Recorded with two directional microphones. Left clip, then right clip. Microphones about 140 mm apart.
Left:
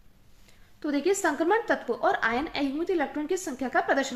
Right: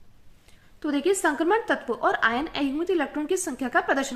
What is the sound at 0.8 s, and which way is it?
A woman's voice, 30° right (ahead or behind).